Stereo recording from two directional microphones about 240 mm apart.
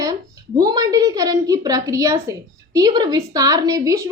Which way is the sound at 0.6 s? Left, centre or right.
Centre.